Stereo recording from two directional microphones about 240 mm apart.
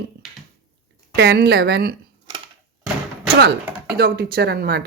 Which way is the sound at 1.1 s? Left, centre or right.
Right.